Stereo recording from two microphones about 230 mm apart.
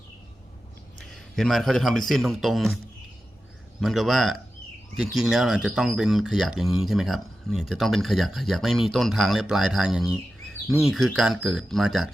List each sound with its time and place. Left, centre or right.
0.9 s a man's voice: centre
3.8 s speech: centre